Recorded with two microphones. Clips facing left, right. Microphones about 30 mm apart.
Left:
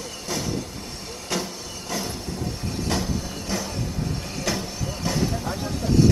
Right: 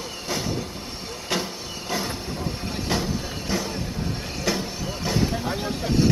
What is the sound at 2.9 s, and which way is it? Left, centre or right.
Vehicle, centre.